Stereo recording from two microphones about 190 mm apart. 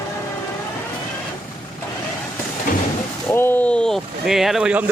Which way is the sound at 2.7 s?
45° left (ahead or behind).